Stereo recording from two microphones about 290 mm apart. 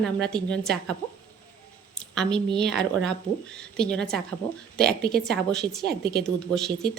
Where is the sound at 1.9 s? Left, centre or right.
Centre.